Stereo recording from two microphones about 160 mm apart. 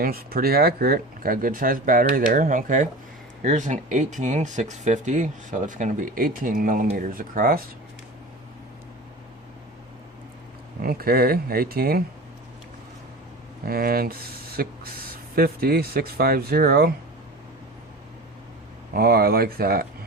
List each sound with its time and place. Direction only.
0.0 s speech: 70° right (ahead or behind)
10.8 s speech: 70° right (ahead or behind)
13.7 s speech: 70° right (ahead or behind)
18.9 s speech: 70° right (ahead or behind)